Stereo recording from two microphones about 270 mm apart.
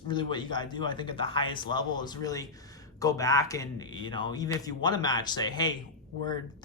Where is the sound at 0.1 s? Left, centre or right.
Centre.